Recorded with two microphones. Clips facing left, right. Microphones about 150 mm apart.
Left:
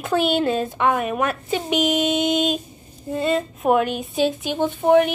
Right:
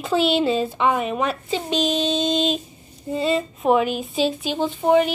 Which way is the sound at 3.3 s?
Centre (ahead or behind).